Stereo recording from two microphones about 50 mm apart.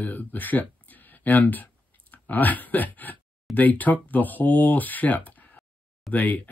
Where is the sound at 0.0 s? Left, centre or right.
Left.